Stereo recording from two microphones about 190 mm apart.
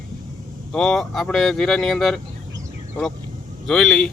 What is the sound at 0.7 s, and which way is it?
Speech, 5° left (ahead or behind).